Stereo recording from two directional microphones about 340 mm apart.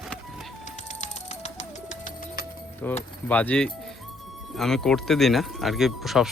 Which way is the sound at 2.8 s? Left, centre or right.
Centre.